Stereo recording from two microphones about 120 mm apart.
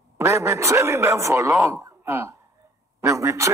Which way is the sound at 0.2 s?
25° right (ahead or behind).